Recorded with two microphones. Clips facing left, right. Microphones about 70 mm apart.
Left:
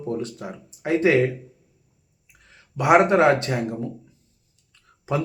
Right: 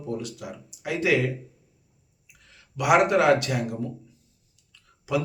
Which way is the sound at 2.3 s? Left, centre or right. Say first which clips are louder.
Left 3 dB; left.